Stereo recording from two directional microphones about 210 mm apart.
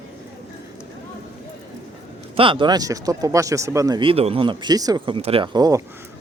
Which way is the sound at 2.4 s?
25° right (ahead or behind).